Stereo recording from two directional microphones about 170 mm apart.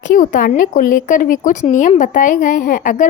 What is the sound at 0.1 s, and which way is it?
A woman's voice, 55° left (ahead or behind).